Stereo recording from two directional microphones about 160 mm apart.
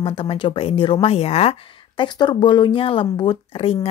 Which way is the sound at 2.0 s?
30° left (ahead or behind).